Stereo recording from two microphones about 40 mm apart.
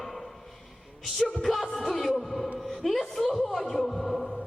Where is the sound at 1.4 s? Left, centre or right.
Centre.